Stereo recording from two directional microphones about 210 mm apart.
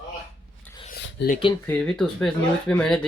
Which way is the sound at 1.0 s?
55° left (ahead or behind).